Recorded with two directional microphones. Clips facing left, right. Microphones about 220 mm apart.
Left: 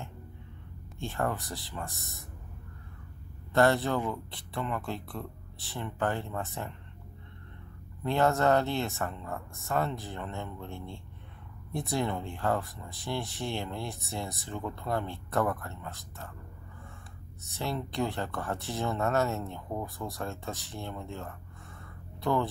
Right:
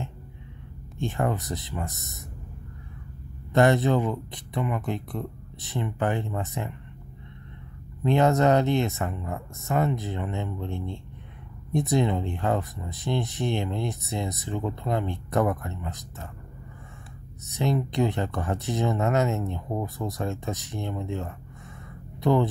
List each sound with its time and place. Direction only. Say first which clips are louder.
0.9 s speech: right 5 dB; 20° right (ahead or behind)
3.5 s speech: right 5 dB; 20° right (ahead or behind)
8.0 s speech: right 5 dB; 20° right (ahead or behind)
17.5 s speech: right 8 dB; 20° right (ahead or behind)